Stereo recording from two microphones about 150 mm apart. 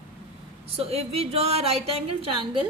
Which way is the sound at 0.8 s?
40° right (ahead or behind).